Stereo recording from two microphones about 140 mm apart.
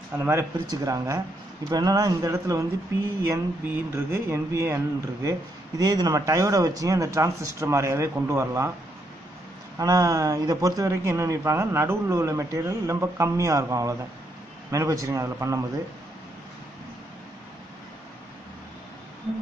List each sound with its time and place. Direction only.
0.2 s speech: 20° right (ahead or behind)
9.8 s speech: 25° right (ahead or behind)